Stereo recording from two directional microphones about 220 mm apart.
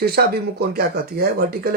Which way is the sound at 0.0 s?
45° right (ahead or behind).